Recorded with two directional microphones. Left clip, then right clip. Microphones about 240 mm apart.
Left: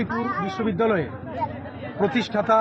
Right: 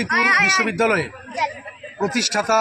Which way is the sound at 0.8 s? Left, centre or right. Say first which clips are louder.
Right 3 dB; centre.